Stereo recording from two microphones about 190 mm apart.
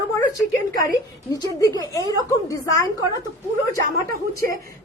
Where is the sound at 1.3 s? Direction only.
20° left (ahead or behind).